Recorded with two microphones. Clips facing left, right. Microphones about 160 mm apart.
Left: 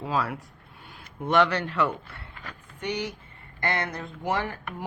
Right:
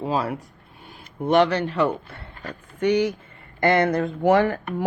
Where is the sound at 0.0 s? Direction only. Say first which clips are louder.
Right 4 dB; 25° right (ahead or behind).